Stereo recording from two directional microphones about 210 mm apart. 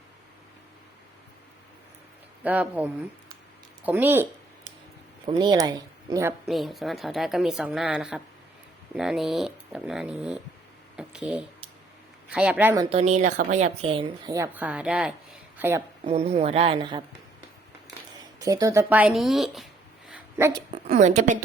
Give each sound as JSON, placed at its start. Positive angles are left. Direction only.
{"t": 2.4, "sound": "speech", "side_deg": -5}
{"t": 5.2, "sound": "speech", "side_deg": -20}
{"t": 6.5, "sound": "a woman's voice", "side_deg": 0}
{"t": 10.9, "sound": "a sound", "side_deg": -5}
{"t": 12.3, "sound": "speech", "side_deg": -5}
{"t": 12.8, "sound": "speech", "side_deg": -30}
{"t": 16.0, "sound": "speech", "side_deg": -30}
{"t": 18.3, "sound": "speech", "side_deg": -15}
{"t": 20.1, "sound": "dog", "side_deg": -10}
{"t": 20.7, "sound": "a woman's voice", "side_deg": -35}